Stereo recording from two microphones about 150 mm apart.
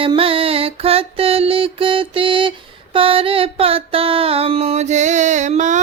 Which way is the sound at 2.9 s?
35° right (ahead or behind).